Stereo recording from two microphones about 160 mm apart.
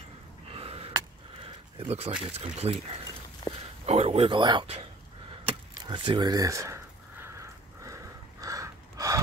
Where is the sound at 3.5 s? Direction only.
20° left (ahead or behind).